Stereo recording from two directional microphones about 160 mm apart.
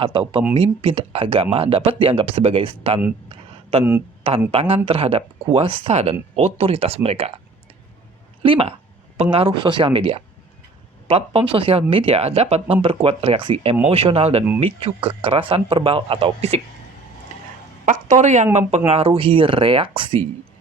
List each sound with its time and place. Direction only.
0.0 s speech: 35° right (ahead or behind)
3.2 s a sound: 35° right (ahead or behind)
4.2 s speech: 40° right (ahead or behind)
8.4 s speech: 35° right (ahead or behind)
17.8 s speech: 50° right (ahead or behind); by 20.2 s 35° right (ahead or behind)